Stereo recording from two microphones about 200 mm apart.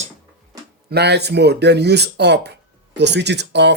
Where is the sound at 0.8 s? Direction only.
55° right (ahead or behind).